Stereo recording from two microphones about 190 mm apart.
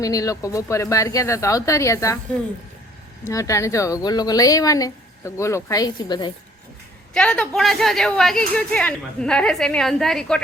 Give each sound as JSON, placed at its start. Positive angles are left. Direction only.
{"t": 0.0, "sound": "speech", "side_deg": 20}
{"t": 3.2, "sound": "speech", "side_deg": 15}
{"t": 7.1, "sound": "speech", "side_deg": 5}